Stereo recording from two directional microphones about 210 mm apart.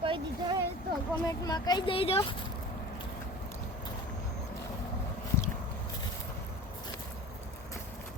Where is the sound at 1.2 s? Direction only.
15° left (ahead or behind).